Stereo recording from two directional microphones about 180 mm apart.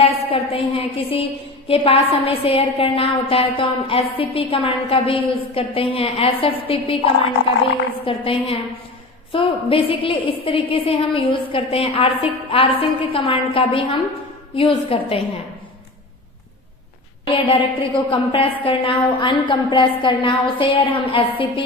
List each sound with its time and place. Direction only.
0.0 s a woman's voice: 30° left (ahead or behind)
17.3 s a woman's voice: 30° left (ahead or behind)